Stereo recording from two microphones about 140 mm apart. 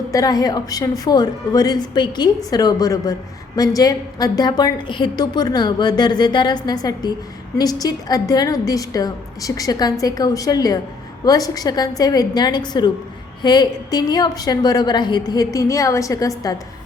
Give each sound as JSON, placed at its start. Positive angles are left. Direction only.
{"t": 0.1, "sound": "a woman's voice", "side_deg": 25}